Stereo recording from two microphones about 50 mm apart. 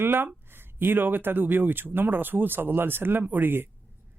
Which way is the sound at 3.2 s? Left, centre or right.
Right.